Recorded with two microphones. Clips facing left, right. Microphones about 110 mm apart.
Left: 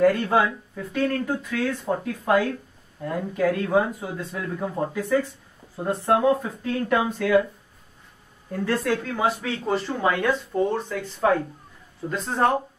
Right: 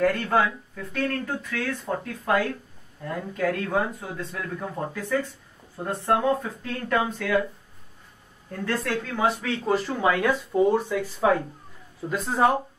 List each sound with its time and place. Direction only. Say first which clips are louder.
0.0 s speech: left 3 dB; 15° left (ahead or behind)
8.5 s speech: left 4 dB; 5° left (ahead or behind)